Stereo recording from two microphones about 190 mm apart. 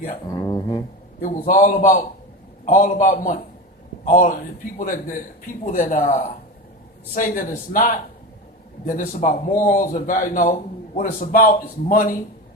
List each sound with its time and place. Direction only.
0.3 s speech: 20° left (ahead or behind)
1.2 s speech: 45° left (ahead or behind)